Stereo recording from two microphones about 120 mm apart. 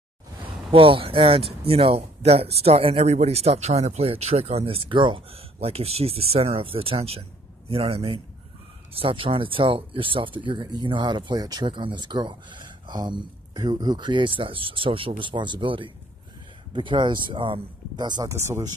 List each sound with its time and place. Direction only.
0.7 s speech: 50° right (ahead or behind)
18.3 s speech: 25° right (ahead or behind)